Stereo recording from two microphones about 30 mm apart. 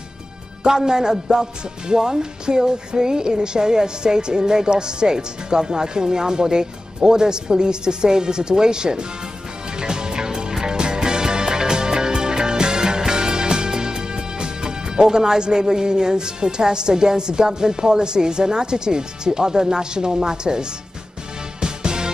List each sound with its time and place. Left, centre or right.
0.7 s a man's voice: centre
1.3 s music: centre